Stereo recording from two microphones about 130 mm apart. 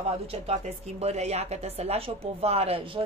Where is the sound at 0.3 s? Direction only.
50° right (ahead or behind).